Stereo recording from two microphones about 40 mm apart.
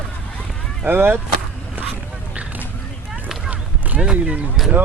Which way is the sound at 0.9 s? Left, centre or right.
Right.